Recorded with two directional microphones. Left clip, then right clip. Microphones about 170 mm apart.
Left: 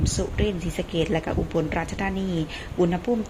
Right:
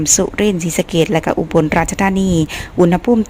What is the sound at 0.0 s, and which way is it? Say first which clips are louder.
Speech: right 12 dB; 35° right (ahead or behind).